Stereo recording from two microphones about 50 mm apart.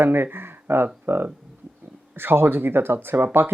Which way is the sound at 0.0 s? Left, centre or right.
Right.